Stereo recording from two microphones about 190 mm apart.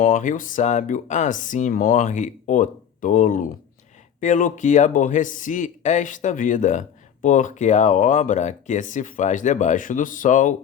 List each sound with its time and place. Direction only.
0.0 s speech: 45° left (ahead or behind)